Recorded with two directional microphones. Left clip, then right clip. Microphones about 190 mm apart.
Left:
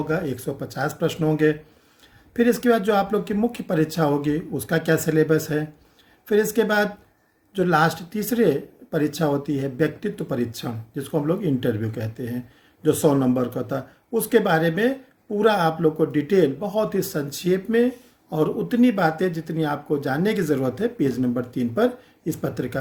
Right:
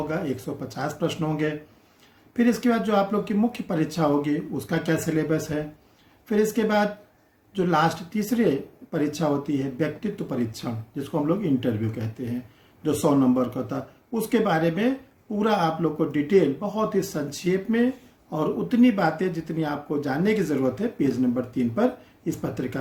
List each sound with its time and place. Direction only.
0.1 s speech: 50° left (ahead or behind)
12.8 s speech: 55° left (ahead or behind)